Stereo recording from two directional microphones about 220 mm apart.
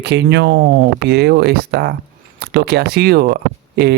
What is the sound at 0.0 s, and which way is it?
A man's voice, 50° right (ahead or behind).